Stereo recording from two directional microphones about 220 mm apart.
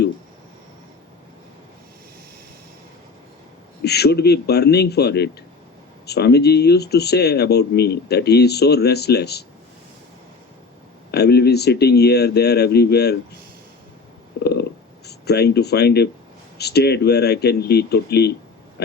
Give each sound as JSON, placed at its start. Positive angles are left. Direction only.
{"t": 3.8, "sound": "speech", "side_deg": 45}
{"t": 11.1, "sound": "speech", "side_deg": 45}
{"t": 14.4, "sound": "a sound", "side_deg": 45}
{"t": 16.6, "sound": "speech", "side_deg": 50}